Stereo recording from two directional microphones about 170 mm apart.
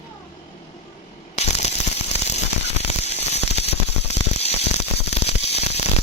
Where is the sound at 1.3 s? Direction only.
40° left (ahead or behind).